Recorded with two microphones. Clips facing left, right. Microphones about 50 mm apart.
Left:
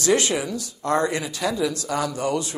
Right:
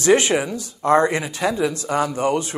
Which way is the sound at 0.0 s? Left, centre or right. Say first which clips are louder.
Right 5 dB; right.